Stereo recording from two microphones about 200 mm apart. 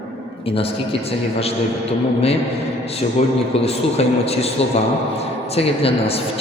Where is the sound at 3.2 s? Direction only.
30° left (ahead or behind).